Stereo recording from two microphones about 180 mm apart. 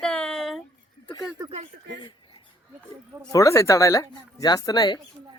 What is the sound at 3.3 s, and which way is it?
Speech, 15° left (ahead or behind).